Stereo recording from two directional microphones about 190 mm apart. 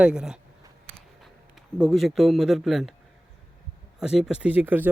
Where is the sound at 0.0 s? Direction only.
5° right (ahead or behind).